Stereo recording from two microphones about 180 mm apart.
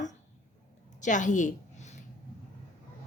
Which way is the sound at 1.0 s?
45° left (ahead or behind).